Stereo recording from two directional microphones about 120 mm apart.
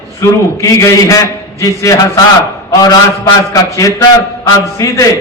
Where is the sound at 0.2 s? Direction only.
25° left (ahead or behind).